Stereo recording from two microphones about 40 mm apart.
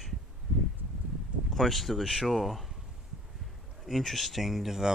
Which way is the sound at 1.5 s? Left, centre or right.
Centre.